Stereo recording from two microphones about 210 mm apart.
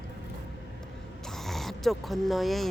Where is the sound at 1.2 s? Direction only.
Centre (ahead or behind).